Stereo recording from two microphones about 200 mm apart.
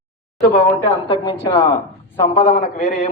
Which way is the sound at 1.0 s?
25° left (ahead or behind).